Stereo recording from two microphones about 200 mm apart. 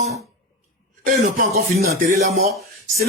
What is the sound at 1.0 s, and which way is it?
Speech, 40° right (ahead or behind).